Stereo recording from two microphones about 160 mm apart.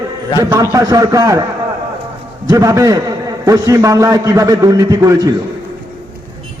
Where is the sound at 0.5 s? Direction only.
20° right (ahead or behind).